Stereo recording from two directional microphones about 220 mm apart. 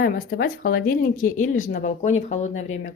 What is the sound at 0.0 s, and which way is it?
Speech, 40° left (ahead or behind).